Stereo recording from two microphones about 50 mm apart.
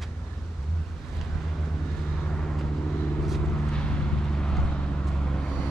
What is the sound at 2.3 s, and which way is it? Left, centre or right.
Vehicle, centre.